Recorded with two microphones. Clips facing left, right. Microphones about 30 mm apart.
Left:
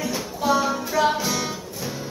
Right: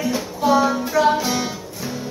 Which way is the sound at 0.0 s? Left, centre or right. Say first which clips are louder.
Right 4 dB; centre.